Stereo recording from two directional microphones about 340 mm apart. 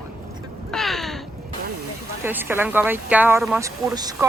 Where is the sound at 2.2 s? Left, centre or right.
Centre.